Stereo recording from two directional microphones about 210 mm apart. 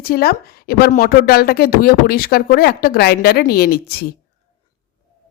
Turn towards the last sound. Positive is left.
turn(degrees=45)  # may be behind; listen again after turning